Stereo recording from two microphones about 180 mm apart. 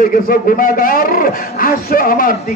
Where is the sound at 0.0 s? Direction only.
50° left (ahead or behind).